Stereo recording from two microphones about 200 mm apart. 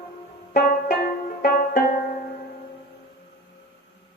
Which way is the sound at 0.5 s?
45° left (ahead or behind).